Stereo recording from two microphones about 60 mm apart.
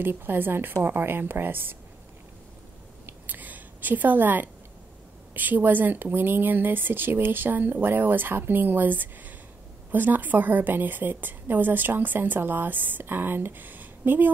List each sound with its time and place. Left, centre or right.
0.0 s a woman's voice: right
3.3 s a sound: right
5.3 s a woman's voice: right